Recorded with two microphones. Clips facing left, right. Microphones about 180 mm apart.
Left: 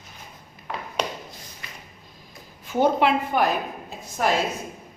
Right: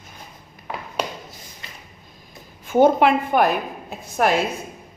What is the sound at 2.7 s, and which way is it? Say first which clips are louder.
Speech: right 5 dB; 50° right (ahead or behind).